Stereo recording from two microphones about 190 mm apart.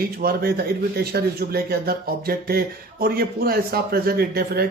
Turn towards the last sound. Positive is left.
turn(degrees=-55)  # may be behind; listen again after turning